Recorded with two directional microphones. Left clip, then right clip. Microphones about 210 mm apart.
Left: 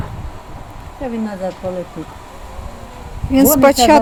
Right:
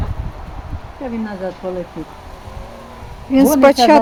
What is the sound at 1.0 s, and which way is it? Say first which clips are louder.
Speech: left 2 dB; 50° left (ahead or behind).